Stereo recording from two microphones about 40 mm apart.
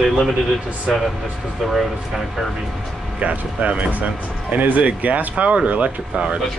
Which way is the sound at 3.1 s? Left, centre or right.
Right.